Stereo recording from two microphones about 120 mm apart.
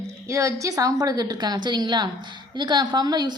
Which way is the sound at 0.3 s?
25° right (ahead or behind).